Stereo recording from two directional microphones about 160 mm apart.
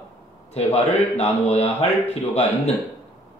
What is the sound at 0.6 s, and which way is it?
Speech, 40° left (ahead or behind).